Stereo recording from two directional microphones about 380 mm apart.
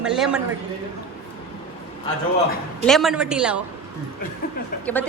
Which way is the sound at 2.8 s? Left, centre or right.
Centre.